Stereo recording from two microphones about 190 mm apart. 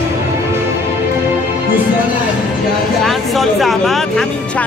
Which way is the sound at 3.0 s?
Centre (ahead or behind).